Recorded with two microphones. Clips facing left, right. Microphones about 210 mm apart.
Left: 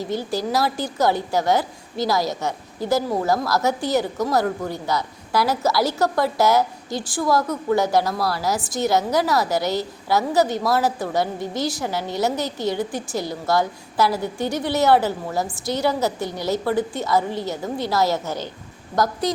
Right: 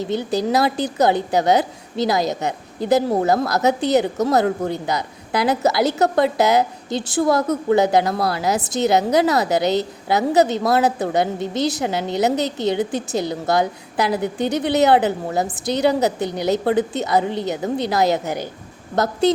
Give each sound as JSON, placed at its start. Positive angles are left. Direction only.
{"t": 0.0, "sound": "a woman's voice", "side_deg": -20}